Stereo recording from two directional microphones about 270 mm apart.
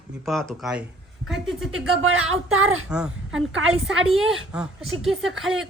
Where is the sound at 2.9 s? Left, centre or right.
Centre.